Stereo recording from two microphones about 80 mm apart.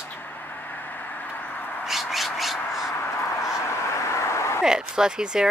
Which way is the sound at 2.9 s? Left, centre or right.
Left.